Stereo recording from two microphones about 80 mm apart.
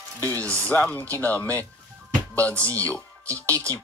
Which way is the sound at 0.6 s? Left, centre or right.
Left.